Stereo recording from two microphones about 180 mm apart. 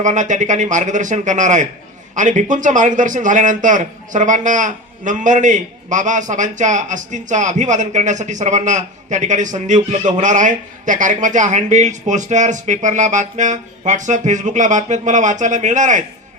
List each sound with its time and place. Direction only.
0.0 s a man's voice: 45° right (ahead or behind)